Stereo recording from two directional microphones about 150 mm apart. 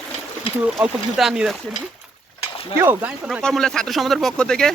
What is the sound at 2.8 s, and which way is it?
Speech, 15° right (ahead or behind).